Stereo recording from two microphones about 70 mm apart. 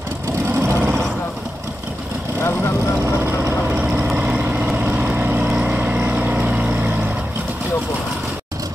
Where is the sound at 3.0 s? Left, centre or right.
Right.